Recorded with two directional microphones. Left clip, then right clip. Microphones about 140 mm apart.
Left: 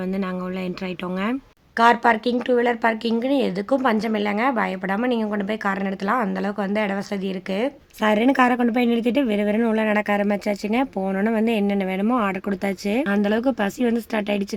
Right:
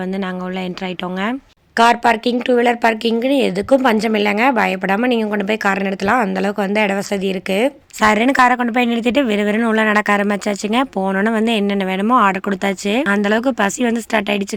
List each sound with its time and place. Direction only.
1.2 s a woman's voice: 30° right (ahead or behind)
8.0 s speech: 45° right (ahead or behind)